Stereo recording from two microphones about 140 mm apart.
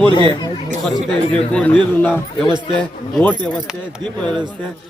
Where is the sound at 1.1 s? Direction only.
5° left (ahead or behind).